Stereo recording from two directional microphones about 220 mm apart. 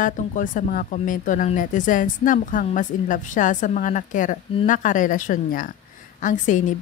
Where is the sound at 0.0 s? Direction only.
35° left (ahead or behind).